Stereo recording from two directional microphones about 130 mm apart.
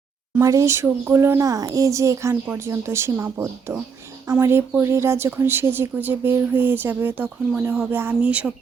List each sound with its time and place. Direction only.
0.3 s speech: 25° right (ahead or behind)